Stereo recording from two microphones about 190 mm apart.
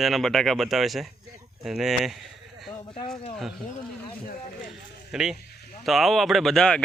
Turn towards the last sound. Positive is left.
turn(degrees=5)  # may be behind; listen again after turning